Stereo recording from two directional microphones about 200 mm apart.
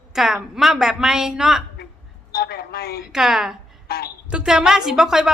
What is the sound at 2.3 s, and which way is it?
Speech, 50° left (ahead or behind).